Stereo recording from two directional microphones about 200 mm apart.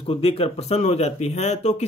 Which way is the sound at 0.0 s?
30° left (ahead or behind).